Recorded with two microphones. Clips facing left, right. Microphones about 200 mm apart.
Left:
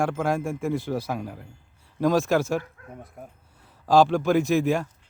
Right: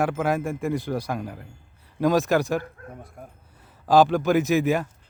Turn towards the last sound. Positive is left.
turn(degrees=0)  # may be behind; listen again after turning